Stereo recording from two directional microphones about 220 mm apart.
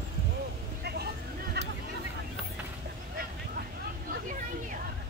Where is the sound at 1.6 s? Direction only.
50° right (ahead or behind).